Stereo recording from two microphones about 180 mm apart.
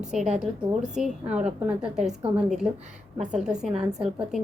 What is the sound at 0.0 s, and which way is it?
A woman's voice, 5° right (ahead or behind).